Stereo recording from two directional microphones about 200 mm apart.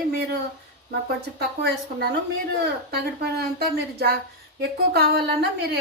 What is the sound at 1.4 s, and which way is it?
Speech, 55° right (ahead or behind).